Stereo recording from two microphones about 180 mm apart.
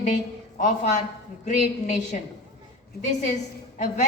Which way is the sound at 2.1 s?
45° left (ahead or behind).